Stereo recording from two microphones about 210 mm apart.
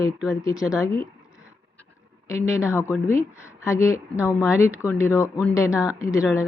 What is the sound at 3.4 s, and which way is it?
Speech, 15° left (ahead or behind).